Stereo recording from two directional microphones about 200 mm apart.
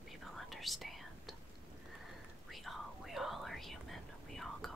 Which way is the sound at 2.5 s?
Centre (ahead or behind).